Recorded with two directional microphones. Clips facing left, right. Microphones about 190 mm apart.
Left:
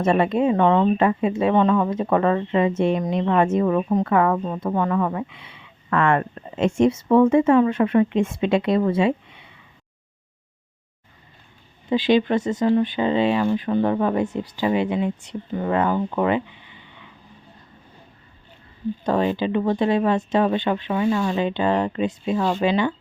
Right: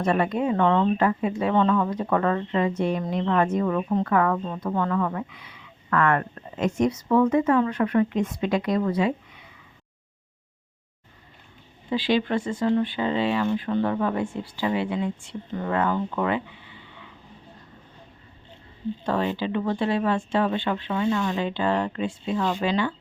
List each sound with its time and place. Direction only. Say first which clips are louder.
0.0 s a woman's voice: left 4 dB; 25° left (ahead or behind)
11.9 s a woman's voice: left 5 dB; 20° left (ahead or behind)
19.0 s a woman's voice: left 5 dB; 20° left (ahead or behind)